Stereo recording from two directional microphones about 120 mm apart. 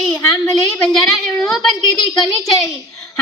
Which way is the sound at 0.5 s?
Centre (ahead or behind).